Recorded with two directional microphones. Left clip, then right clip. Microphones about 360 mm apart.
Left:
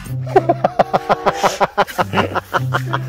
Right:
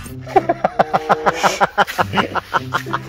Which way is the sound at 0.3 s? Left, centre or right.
Left.